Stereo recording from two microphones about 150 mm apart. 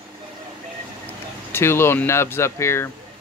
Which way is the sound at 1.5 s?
15° left (ahead or behind).